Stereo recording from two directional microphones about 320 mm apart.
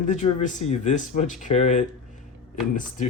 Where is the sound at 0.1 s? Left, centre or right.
Left.